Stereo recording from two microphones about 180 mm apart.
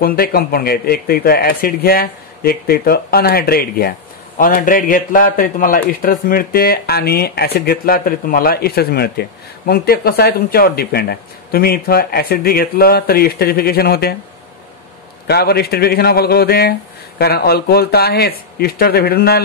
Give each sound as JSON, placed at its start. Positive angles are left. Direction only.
{"t": 0.0, "sound": "a man's voice", "side_deg": 55}
{"t": 15.2, "sound": "a man's voice", "side_deg": 60}